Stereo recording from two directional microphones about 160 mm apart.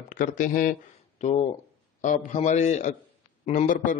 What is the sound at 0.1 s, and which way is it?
Speech, 55° left (ahead or behind).